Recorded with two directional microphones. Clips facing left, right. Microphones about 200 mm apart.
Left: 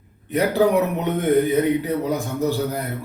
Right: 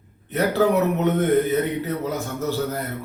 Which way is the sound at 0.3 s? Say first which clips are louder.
Left 2 dB; 15° left (ahead or behind).